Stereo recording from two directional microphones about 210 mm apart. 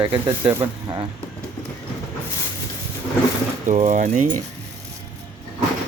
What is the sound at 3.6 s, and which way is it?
Speech, 35° right (ahead or behind).